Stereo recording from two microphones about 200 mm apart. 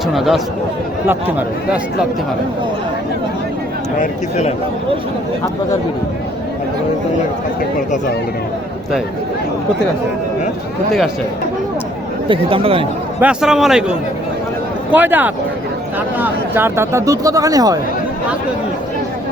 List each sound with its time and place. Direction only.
0.1 s a man's voice: centre (ahead or behind)
4.0 s speech: 35° left (ahead or behind)
12.3 s speech: 25° right (ahead or behind)
13.1 s a man's voice: 5° right (ahead or behind)
14.9 s speech: 10° right (ahead or behind)